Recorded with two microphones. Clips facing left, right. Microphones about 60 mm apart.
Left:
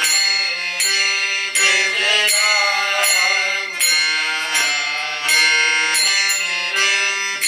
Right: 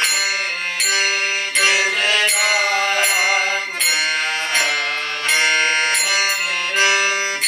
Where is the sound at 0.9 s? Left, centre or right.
Centre.